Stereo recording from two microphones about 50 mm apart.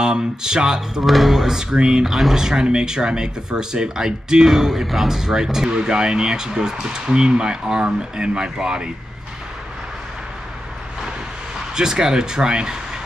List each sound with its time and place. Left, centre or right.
0.0 s speech: centre
1.0 s speech: centre
11.7 s speech: centre